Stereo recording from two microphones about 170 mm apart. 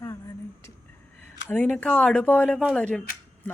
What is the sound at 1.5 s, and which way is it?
Speech, 5° left (ahead or behind).